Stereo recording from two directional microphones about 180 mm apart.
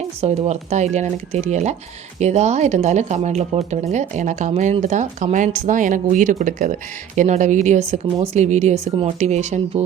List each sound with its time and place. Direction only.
0.2 s speech: 35° right (ahead or behind)